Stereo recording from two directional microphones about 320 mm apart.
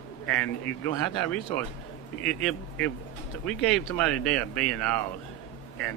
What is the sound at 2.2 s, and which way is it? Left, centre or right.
Speech, centre.